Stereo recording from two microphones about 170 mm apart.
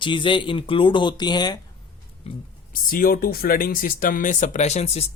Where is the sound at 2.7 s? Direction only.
55° left (ahead or behind).